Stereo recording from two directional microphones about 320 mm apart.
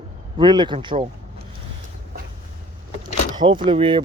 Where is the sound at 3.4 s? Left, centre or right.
Centre.